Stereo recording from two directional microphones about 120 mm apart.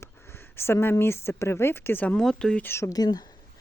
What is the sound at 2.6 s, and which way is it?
Speech, 20° left (ahead or behind).